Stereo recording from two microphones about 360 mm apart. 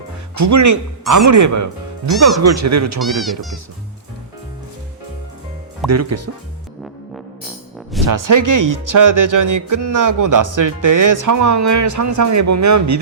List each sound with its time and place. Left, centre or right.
0.3 s speech: right
3.0 s speech: centre
5.9 s speech: right
8.0 s speech: right